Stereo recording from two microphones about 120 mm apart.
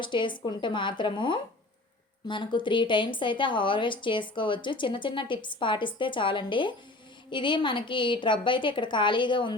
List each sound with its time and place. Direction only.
0.0 s a woman's voice: 40° left (ahead or behind)